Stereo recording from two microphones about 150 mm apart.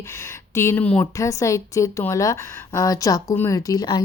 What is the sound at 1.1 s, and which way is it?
Speech, 20° left (ahead or behind).